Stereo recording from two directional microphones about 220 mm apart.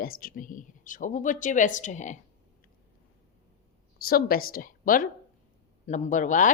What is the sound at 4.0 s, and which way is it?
Speech, 40° left (ahead or behind).